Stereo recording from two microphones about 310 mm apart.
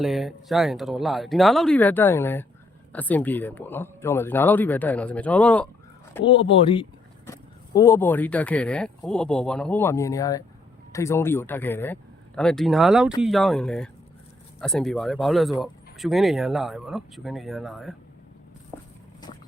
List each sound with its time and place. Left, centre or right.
0.0 s speech: centre
6.2 s speech: centre